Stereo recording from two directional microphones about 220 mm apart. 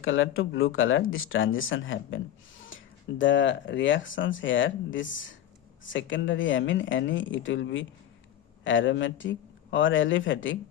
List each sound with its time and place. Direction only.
0.0 s speech: 65° left (ahead or behind)